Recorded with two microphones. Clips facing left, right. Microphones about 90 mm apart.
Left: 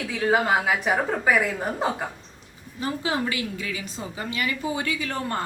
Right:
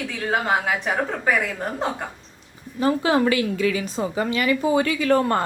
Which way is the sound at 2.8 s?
70° right (ahead or behind).